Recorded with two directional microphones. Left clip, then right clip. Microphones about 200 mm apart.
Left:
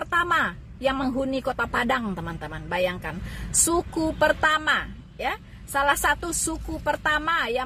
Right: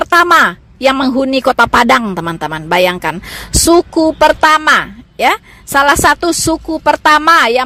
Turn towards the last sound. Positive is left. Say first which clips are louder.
# right 16 dB
turn(degrees=-50)  # may be behind; listen again after turning